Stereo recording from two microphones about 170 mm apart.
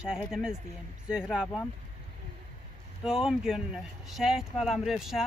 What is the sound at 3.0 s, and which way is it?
Speech, 5° right (ahead or behind).